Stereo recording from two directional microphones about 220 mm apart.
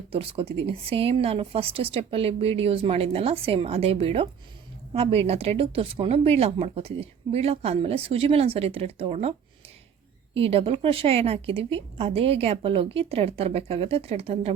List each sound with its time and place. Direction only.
0.1 s a woman's voice: 25° right (ahead or behind)
10.3 s a woman's voice: 25° right (ahead or behind)